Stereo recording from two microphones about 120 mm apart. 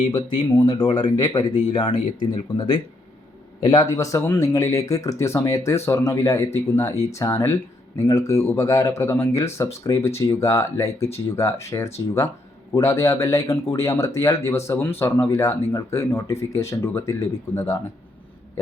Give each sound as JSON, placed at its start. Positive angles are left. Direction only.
{"t": 0.6, "sound": "speech", "side_deg": 35}
{"t": 3.7, "sound": "speech", "side_deg": 30}